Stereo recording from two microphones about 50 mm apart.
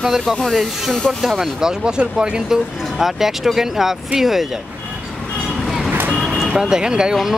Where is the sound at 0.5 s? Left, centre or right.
Centre.